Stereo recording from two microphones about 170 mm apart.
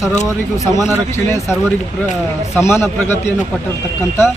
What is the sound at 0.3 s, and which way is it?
Speech, 20° left (ahead or behind).